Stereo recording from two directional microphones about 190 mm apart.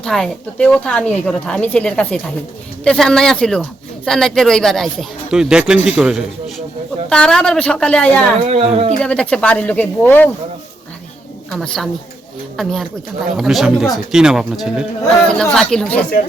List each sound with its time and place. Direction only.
0.0 s speech: 5° left (ahead or behind)
8.4 s speech: 35° right (ahead or behind)
9.0 s speech: 5° left (ahead or behind)
11.5 s speech: 5° left (ahead or behind)